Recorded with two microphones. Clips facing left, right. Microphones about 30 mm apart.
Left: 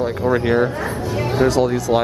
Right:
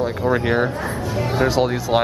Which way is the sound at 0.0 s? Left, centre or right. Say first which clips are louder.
Left 1 dB; centre.